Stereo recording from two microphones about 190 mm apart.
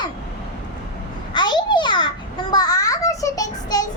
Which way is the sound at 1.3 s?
25° left (ahead or behind).